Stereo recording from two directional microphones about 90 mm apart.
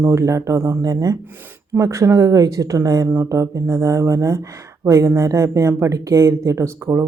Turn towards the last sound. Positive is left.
turn(degrees=-30)  # may be behind; listen again after turning